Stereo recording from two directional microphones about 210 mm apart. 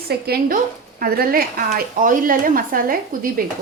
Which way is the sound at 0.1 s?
45° right (ahead or behind).